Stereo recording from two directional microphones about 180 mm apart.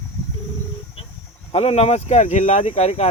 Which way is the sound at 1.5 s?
35° left (ahead or behind).